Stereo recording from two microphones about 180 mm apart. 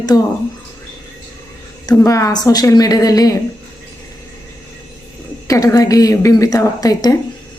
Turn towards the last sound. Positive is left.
turn(degrees=20)  # may be behind; listen again after turning